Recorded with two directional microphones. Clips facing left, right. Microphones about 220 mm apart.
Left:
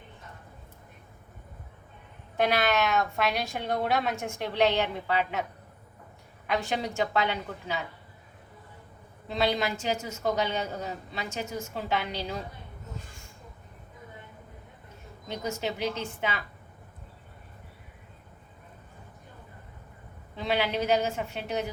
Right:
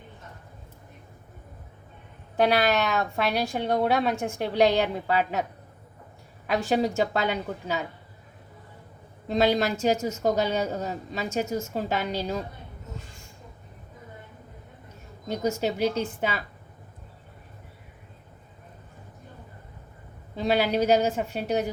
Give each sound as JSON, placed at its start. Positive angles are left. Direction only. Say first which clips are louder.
{"t": 2.3, "sound": "a woman's voice", "louder": "right 3 dB", "side_deg": -35}
{"t": 6.5, "sound": "a woman's voice", "louder": "right 6 dB", "side_deg": -40}
{"t": 9.2, "sound": "a woman's voice", "louder": "right 5 dB", "side_deg": -40}
{"t": 15.3, "sound": "a woman's voice", "louder": "right 6 dB", "side_deg": -40}
{"t": 20.3, "sound": "a woman's voice", "louder": "right 5 dB", "side_deg": -40}